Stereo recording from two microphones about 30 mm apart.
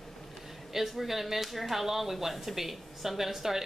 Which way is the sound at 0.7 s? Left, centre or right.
Centre.